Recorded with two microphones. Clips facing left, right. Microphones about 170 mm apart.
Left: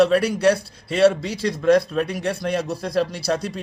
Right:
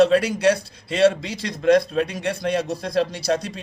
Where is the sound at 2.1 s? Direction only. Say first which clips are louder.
Even; 20° right (ahead or behind).